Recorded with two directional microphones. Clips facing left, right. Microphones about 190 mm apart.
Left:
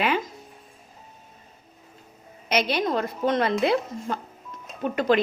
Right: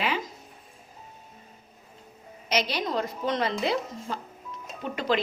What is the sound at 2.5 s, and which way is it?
Speech, 55° left (ahead or behind).